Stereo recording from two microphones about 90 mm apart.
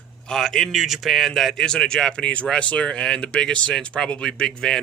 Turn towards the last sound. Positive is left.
turn(degrees=5)  # may be behind; listen again after turning